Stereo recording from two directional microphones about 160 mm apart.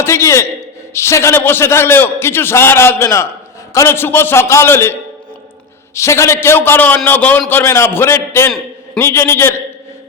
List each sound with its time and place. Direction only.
0.0 s a man's voice: 15° left (ahead or behind)